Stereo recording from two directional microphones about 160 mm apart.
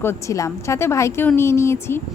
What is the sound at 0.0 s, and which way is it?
A woman's voice, 15° left (ahead or behind).